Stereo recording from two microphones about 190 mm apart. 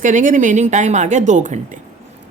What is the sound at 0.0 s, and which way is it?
Speech, 40° right (ahead or behind).